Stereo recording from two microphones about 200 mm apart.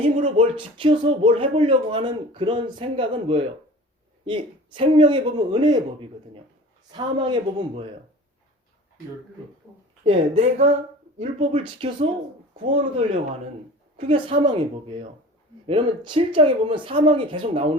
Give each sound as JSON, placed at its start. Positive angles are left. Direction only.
{"t": 0.0, "sound": "speech", "side_deg": -40}
{"t": 0.5, "sound": "speech", "side_deg": -25}
{"t": 9.7, "sound": "a sound", "side_deg": -10}
{"t": 10.0, "sound": "speech", "side_deg": -30}
{"t": 14.1, "sound": "speech", "side_deg": -25}